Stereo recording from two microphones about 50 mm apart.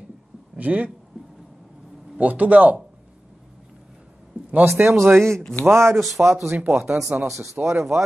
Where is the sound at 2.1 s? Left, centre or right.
Right.